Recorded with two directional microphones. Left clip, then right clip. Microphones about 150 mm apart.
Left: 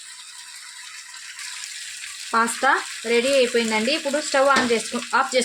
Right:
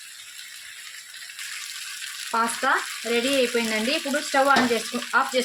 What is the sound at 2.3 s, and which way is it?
Frying, 75° left (ahead or behind).